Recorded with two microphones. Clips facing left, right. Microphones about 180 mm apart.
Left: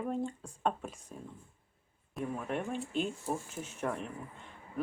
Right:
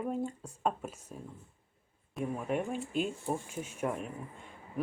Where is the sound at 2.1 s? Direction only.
10° right (ahead or behind).